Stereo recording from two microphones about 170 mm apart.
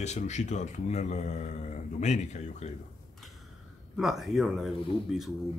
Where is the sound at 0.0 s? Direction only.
45° left (ahead or behind).